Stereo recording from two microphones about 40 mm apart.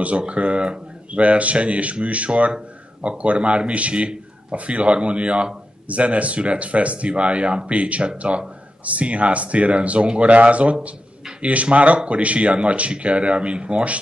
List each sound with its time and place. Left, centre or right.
0.3 s speech: right